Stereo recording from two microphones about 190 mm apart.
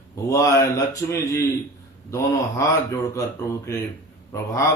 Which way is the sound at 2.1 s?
15° left (ahead or behind).